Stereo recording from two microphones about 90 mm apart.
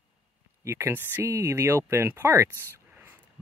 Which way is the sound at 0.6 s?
30° right (ahead or behind).